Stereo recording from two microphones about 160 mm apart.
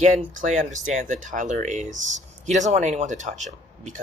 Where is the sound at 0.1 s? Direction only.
50° right (ahead or behind).